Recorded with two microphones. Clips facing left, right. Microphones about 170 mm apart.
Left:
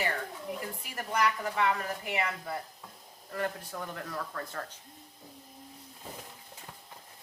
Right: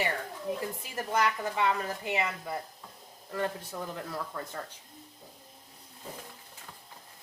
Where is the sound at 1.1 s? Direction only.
25° right (ahead or behind).